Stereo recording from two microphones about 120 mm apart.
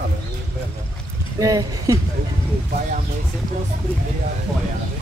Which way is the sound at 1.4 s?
30° right (ahead or behind).